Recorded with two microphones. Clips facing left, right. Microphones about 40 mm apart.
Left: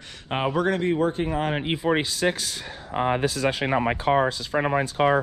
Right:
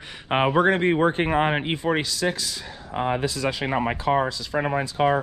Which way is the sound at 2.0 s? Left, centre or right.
Left.